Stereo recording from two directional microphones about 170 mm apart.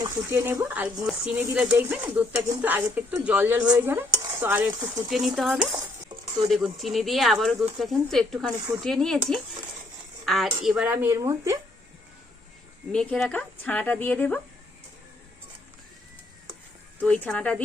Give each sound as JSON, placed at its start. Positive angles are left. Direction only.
{"t": 0.0, "sound": "dishes", "side_deg": -15}
{"t": 1.0, "sound": "speech", "side_deg": -5}
{"t": 1.4, "sound": "dishes", "side_deg": -5}
{"t": 4.4, "sound": "stir", "side_deg": -10}
{"t": 4.7, "sound": "speech", "side_deg": -25}
{"t": 5.0, "sound": "speech", "side_deg": 0}
{"t": 5.5, "sound": "stir", "side_deg": -30}
{"t": 6.5, "sound": "speech", "side_deg": 0}
{"t": 10.2, "sound": "speech", "side_deg": 0}
{"t": 10.6, "sound": "dishes", "side_deg": -5}
{"t": 12.9, "sound": "speech", "side_deg": 5}
{"t": 17.0, "sound": "speech", "side_deg": 5}